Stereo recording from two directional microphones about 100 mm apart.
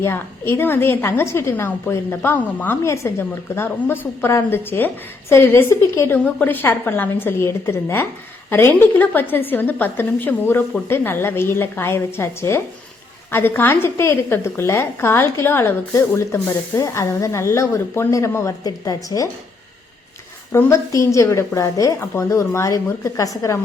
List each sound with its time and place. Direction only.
0.0 s a woman's voice: 25° left (ahead or behind)
20.5 s a woman's voice: 25° left (ahead or behind)